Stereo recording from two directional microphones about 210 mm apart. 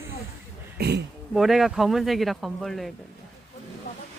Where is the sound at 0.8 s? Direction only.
50° right (ahead or behind).